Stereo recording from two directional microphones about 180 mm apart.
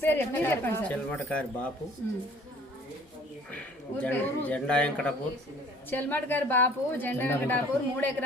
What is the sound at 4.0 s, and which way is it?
A woman's voice, 10° left (ahead or behind).